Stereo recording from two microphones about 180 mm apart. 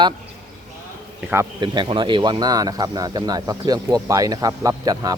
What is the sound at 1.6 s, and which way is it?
Speech, 25° right (ahead or behind).